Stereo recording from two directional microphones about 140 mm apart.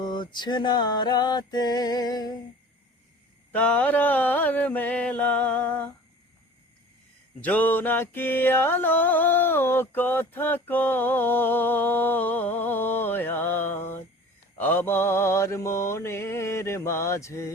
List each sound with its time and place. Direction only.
0.0 s music: 30° left (ahead or behind)
3.5 s music: 10° left (ahead or behind)
7.4 s music: 10° left (ahead or behind)
14.6 s mantra: 15° left (ahead or behind)